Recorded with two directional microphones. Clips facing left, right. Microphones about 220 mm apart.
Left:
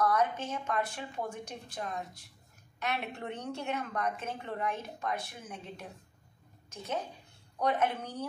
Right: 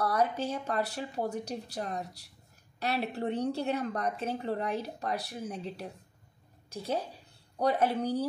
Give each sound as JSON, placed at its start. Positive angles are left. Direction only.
{"t": 0.0, "sound": "a woman's voice", "side_deg": -35}